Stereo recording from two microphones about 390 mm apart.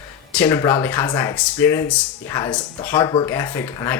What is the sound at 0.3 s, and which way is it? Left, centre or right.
Speech, centre.